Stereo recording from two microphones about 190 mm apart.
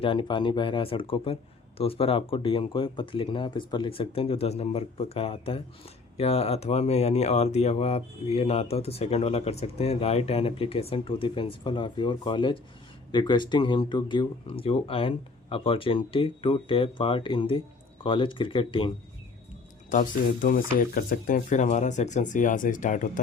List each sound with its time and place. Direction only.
0.0 s speech: 25° left (ahead or behind)
19.9 s speech: 45° left (ahead or behind)